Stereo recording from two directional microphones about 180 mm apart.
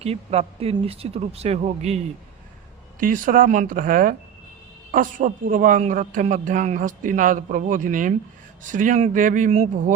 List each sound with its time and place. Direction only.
0.0 s speech: 35° right (ahead or behind)
3.0 s a man's voice: 50° right (ahead or behind)